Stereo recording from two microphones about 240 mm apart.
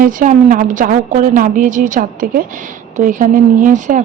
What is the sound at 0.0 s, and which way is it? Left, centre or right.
A woman's voice, right.